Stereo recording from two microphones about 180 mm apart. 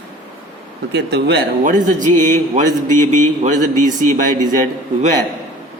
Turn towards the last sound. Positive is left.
turn(degrees=-50)  # may be behind; listen again after turning